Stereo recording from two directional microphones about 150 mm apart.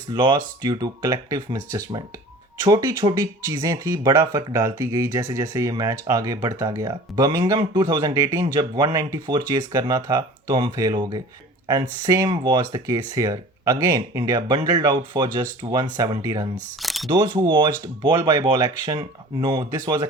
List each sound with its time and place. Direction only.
0.1 s speech: 30° right (ahead or behind)
12.3 s speech: 30° right (ahead or behind)
16.8 s speech: centre (ahead or behind)
17.1 s speech: 30° right (ahead or behind)